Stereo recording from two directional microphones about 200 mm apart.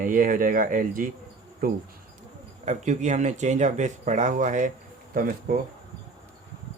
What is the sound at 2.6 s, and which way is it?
Speech, 35° right (ahead or behind).